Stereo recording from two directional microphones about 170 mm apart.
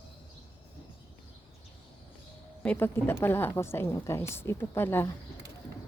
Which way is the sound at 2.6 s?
10° left (ahead or behind).